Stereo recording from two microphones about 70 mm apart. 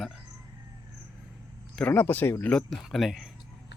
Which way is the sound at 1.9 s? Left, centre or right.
Left.